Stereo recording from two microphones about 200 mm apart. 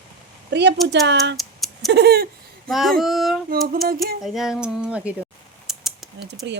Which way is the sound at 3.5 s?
45° right (ahead or behind).